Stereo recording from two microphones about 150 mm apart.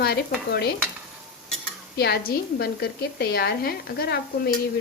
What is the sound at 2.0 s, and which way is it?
A woman's voice, 90° left.